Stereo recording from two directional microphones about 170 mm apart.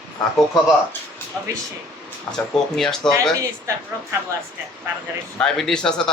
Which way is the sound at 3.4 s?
15° right (ahead or behind).